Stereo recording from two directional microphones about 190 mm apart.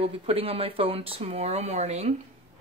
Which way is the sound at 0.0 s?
30° right (ahead or behind).